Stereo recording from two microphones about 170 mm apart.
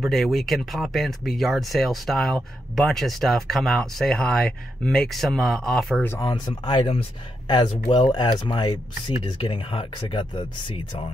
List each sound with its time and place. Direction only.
0.0 s speech: centre (ahead or behind)
6.0 s speech: 20° left (ahead or behind)